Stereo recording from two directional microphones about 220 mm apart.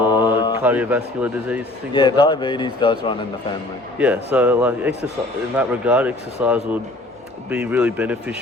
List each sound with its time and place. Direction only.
0.0 s mantra: 20° left (ahead or behind)
0.6 s speech: 5° right (ahead or behind)
1.9 s a man's voice: 20° left (ahead or behind)
3.9 s speech: 5° right (ahead or behind)